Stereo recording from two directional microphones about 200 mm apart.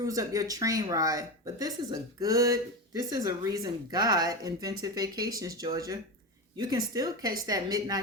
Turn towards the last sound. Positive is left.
turn(degrees=-20)  # may be behind; listen again after turning